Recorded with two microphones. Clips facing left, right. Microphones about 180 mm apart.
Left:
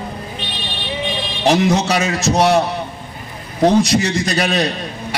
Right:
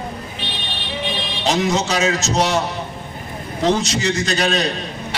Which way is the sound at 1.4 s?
60° left (ahead or behind).